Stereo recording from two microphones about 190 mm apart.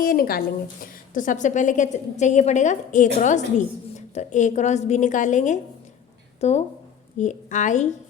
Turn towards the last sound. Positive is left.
turn(degrees=40)  # may be behind; listen again after turning